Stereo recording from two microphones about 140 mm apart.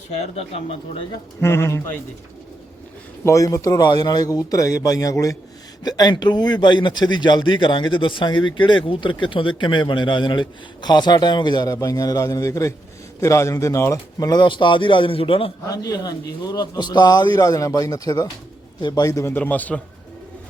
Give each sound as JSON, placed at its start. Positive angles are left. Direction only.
{"t": 1.4, "sound": "a man's voice", "side_deg": 20}
{"t": 3.2, "sound": "a man's voice", "side_deg": 25}
{"t": 15.6, "sound": "a man's voice", "side_deg": 25}